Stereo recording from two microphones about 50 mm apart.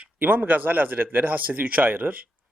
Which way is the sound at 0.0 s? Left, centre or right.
Right.